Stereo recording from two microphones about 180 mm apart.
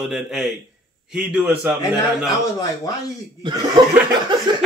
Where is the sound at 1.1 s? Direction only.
10° right (ahead or behind).